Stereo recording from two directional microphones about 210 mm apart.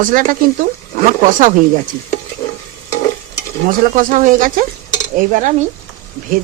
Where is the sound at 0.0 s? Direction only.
40° right (ahead or behind).